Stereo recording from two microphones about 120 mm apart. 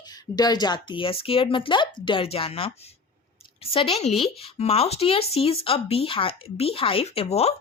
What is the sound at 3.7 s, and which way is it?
Speech, 50° left (ahead or behind).